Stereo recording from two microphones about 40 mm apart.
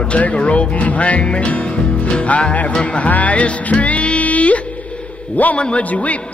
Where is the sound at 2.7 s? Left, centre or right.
Left.